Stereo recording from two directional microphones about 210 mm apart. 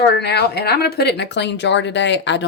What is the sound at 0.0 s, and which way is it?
A woman's voice, 55° left (ahead or behind).